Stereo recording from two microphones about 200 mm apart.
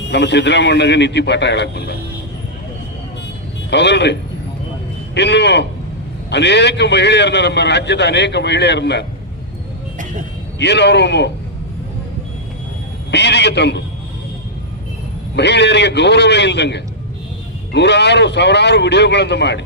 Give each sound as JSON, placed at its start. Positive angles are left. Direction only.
{"t": 0.1, "sound": "a man's voice", "side_deg": 60}
{"t": 3.7, "sound": "a man's voice", "side_deg": 60}
{"t": 10.6, "sound": "a man's voice", "side_deg": 60}
{"t": 13.1, "sound": "a man's voice", "side_deg": 60}
{"t": 15.4, "sound": "a man's voice", "side_deg": 60}